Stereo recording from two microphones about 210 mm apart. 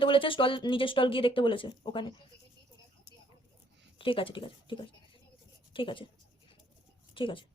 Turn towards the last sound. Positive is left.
turn(degrees=25)  # may be behind; listen again after turning